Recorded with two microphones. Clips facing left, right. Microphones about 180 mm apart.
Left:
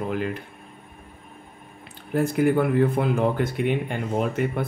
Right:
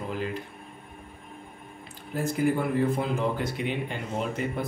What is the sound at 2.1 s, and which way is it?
Speech, 60° left (ahead or behind).